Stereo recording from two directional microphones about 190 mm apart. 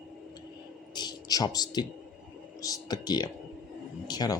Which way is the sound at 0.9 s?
20° left (ahead or behind).